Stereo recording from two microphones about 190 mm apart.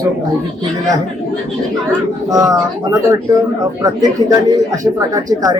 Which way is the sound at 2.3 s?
20° right (ahead or behind).